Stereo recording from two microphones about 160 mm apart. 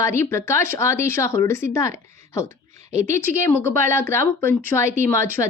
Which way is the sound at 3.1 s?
15° left (ahead or behind).